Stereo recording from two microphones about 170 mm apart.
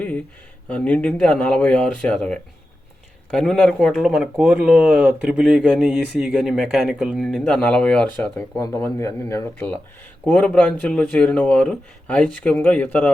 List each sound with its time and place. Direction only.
0.7 s speech: 5° left (ahead or behind)
8.6 s speech: 20° left (ahead or behind)
10.2 s speech: 5° left (ahead or behind)